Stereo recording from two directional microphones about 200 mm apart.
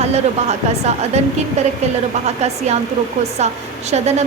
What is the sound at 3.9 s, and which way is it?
Speech, 35° right (ahead or behind).